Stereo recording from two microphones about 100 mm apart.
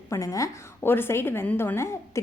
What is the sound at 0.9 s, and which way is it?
A woman's voice, 25° left (ahead or behind).